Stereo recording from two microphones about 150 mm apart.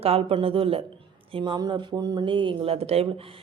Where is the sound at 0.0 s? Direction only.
40° right (ahead or behind).